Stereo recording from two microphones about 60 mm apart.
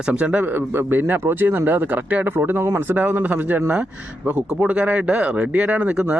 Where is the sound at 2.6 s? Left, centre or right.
Right.